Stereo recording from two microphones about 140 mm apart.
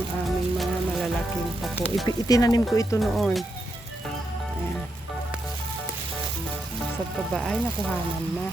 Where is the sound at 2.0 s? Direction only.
25° left (ahead or behind).